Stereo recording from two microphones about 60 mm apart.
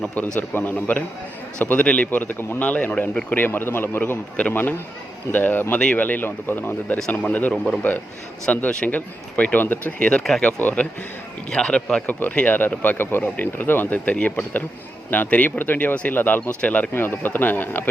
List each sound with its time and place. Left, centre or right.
0.3 s speech: left
7.5 s speech: centre
8.4 s speech: left
11.5 s speech: centre
12.0 s speech: left
16.9 s speech: left